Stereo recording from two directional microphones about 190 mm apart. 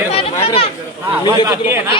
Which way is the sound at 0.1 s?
30° left (ahead or behind).